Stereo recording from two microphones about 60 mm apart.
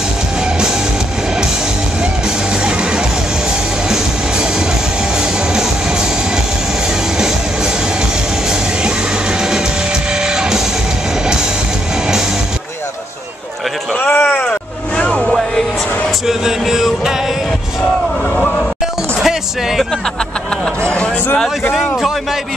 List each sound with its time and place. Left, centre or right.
10.2 s music: centre
14.0 s a sound: left
14.5 s vehicle: centre
16.3 s music: centre